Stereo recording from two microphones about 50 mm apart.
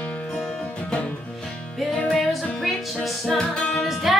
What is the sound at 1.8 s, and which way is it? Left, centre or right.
Music, centre.